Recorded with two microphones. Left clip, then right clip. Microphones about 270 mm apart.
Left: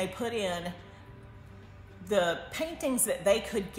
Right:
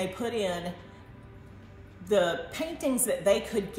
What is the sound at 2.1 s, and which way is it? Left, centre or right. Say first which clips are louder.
A woman's voice: right 2 dB; centre.